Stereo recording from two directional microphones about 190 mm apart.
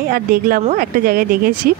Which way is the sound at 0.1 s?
50° right (ahead or behind).